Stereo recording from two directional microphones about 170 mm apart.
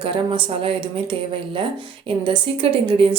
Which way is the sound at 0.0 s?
30° right (ahead or behind).